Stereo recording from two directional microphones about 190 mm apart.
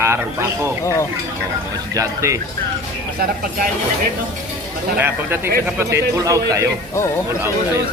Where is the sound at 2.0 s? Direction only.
15° right (ahead or behind).